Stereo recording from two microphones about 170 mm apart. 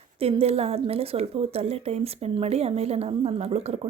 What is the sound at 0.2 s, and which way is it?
A woman's voice, 35° right (ahead or behind).